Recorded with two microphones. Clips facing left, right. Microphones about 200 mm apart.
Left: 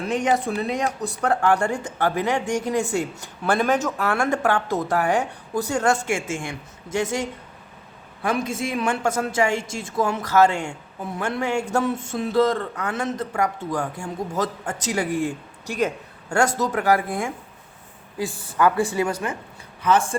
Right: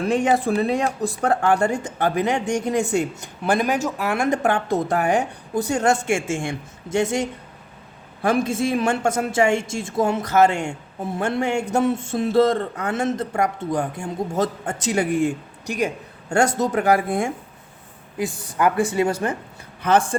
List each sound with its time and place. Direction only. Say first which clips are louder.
0.3 s speech: right 3 dB; 30° right (ahead or behind)
8.4 s speech: right 4 dB; 30° right (ahead or behind)
19.0 s a woman's voice: right 4 dB; 35° right (ahead or behind)
19.8 s speech: right 1 dB; 65° right (ahead or behind)